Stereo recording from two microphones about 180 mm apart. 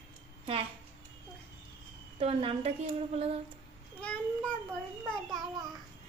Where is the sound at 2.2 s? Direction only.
30° right (ahead or behind).